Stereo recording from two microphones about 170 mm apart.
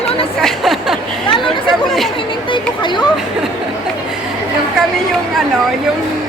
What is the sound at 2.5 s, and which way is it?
Speech, 25° left (ahead or behind).